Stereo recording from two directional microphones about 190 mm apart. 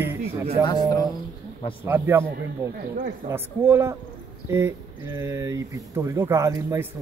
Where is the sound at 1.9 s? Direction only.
10° right (ahead or behind).